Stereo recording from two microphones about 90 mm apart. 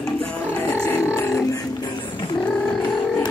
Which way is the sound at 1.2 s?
30° left (ahead or behind).